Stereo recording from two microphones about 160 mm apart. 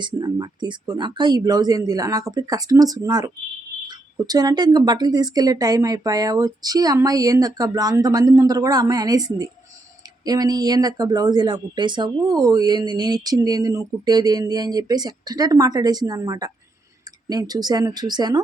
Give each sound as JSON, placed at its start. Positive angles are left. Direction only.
{"t": 0.2, "sound": "speech", "side_deg": -25}